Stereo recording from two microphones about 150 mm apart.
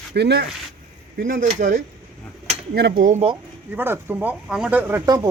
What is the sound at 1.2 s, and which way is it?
Speech, 70° right (ahead or behind).